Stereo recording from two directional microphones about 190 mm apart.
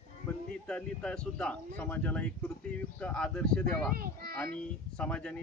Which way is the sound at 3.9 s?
50° right (ahead or behind).